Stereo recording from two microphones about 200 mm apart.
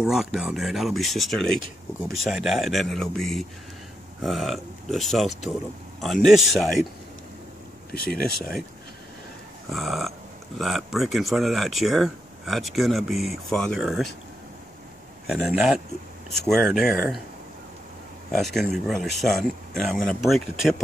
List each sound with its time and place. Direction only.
0.0 s speech: centre (ahead or behind)
8.0 s speech: 50° left (ahead or behind)
9.7 s speech: centre (ahead or behind)
15.2 s speech: centre (ahead or behind)
18.3 s speech: centre (ahead or behind)